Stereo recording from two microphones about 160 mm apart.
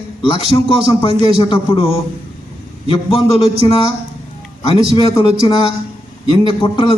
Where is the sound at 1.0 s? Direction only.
30° left (ahead or behind).